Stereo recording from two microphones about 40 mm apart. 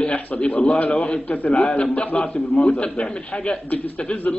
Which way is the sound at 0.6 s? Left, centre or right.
Left.